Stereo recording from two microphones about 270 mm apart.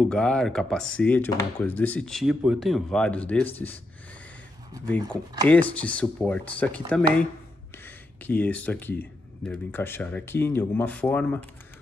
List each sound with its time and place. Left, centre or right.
0.1 s speech: centre
5.5 s speech: centre